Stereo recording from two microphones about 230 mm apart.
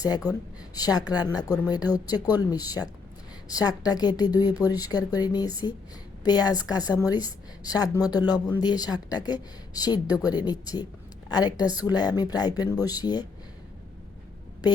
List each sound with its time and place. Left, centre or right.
0.0 s speech: centre